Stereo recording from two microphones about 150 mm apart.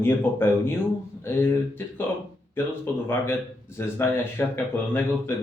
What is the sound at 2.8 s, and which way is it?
Speech, 15° left (ahead or behind).